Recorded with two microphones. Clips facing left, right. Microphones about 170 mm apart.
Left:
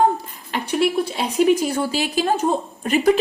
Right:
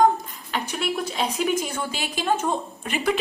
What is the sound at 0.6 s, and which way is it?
A woman's voice, 30° left (ahead or behind).